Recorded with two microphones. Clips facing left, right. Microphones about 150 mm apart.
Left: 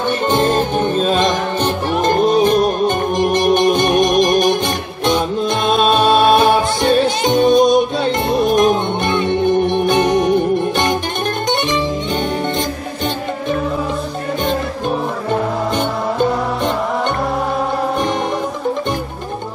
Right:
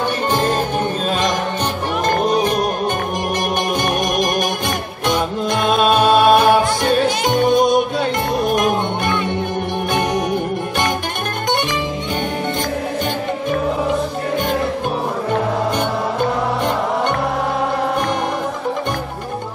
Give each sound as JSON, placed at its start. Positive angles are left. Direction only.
{"t": 0.3, "sound": "music", "side_deg": 25}
{"t": 5.9, "sound": "music", "side_deg": 25}